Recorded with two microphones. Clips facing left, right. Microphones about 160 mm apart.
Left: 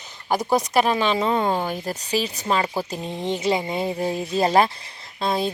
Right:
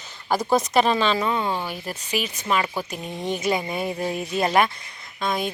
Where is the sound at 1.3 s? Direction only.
45° left (ahead or behind).